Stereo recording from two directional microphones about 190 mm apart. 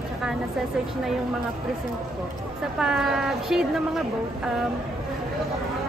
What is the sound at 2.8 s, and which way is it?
Speech, 5° right (ahead or behind).